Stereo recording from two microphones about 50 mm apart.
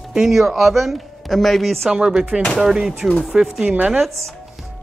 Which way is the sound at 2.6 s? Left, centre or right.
Centre.